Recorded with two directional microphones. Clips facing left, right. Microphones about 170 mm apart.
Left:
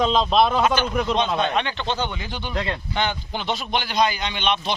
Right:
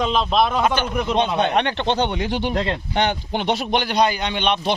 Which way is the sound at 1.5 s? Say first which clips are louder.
Right 5 dB; 60° right (ahead or behind).